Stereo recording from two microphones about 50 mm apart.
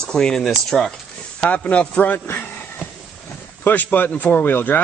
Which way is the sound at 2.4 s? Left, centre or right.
Left.